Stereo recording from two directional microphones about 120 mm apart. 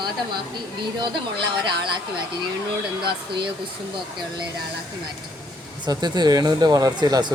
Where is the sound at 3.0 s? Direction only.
45° right (ahead or behind).